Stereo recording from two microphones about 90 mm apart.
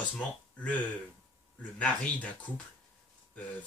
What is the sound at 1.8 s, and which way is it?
Speech, 15° left (ahead or behind).